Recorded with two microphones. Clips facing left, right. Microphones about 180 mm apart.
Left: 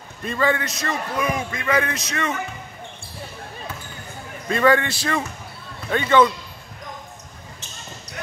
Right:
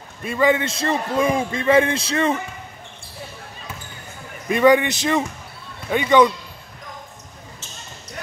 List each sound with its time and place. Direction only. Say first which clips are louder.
0.2 s a man's voice: right 3 dB; 10° right (ahead or behind); by 2.3 s 30° right (ahead or behind)
4.5 s a man's voice: right 3 dB; 15° right (ahead or behind)